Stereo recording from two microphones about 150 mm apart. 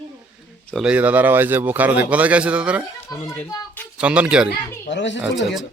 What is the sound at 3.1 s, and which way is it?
Speech, 25° left (ahead or behind).